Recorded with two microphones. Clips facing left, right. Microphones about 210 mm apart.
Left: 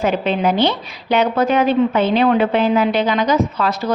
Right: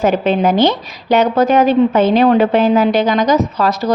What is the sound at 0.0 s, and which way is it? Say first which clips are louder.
A woman's voice: right 4 dB; 45° right (ahead or behind).